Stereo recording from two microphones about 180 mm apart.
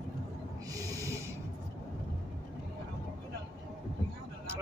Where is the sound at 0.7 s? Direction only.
20° right (ahead or behind).